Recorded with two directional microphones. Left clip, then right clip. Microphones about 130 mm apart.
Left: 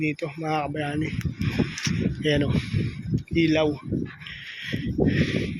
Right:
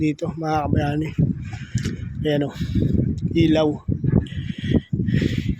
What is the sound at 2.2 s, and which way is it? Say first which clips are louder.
Speech: right 2 dB; 25° right (ahead or behind).